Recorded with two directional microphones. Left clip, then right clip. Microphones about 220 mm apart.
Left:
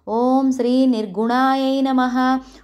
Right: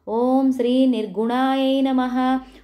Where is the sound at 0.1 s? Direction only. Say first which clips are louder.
Left 2 dB; 20° left (ahead or behind).